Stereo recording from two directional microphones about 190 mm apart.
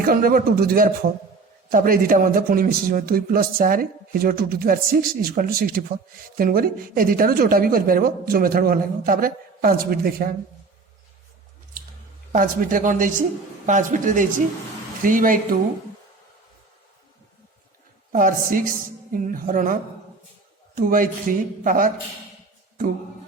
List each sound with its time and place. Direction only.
0.0 s a woman's voice: 50° right (ahead or behind)
12.3 s a woman's voice: 45° right (ahead or behind)
18.1 s a woman's voice: 45° right (ahead or behind)